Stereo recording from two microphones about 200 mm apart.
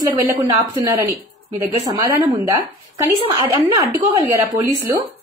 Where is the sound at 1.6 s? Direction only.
15° right (ahead or behind).